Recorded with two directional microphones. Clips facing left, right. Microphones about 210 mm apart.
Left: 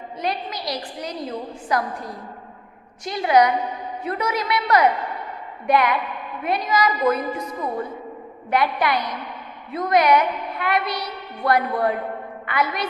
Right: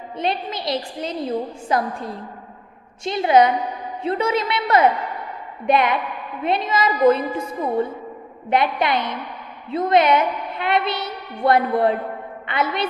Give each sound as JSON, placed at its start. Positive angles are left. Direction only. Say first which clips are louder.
{"t": 0.2, "sound": "a woman's voice", "louder": "right 3 dB", "side_deg": -25}